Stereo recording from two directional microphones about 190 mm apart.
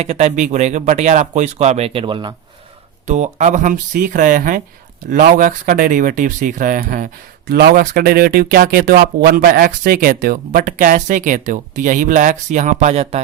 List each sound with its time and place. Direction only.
0.0 s speech: 35° right (ahead or behind)
3.1 s speech: 40° right (ahead or behind)